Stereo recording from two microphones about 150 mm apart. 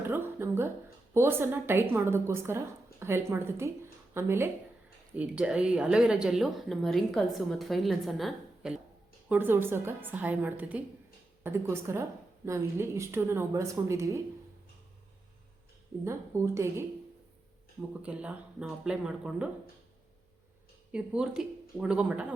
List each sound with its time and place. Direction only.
0.0 s a woman's voice: 15° right (ahead or behind)
9.3 s a woman's voice: 15° right (ahead or behind)
16.0 s a woman's voice: 20° right (ahead or behind)
18.0 s a woman's voice: 5° right (ahead or behind)
20.9 s a woman's voice: 5° right (ahead or behind)